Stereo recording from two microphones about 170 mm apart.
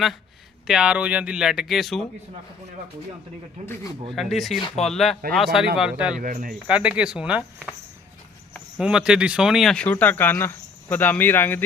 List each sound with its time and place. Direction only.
0.7 s speech: 5° right (ahead or behind)
4.1 s speech: centre (ahead or behind)
6.1 s speech: 45° right (ahead or behind)
6.7 s speech: 5° right (ahead or behind)
8.8 s speech: 5° right (ahead or behind); by 11.6 s 10° left (ahead or behind)